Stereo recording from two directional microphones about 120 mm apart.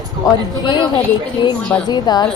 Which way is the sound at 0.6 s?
40° left (ahead or behind).